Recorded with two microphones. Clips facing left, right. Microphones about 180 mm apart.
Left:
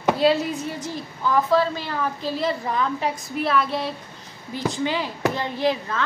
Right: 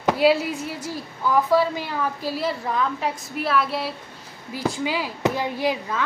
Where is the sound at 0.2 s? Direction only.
10° right (ahead or behind).